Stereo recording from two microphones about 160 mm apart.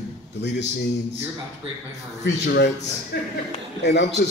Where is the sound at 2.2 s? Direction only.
90° left.